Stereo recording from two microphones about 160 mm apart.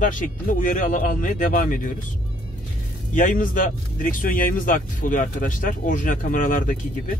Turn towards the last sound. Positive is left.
turn(degrees=55)  # may be behind; listen again after turning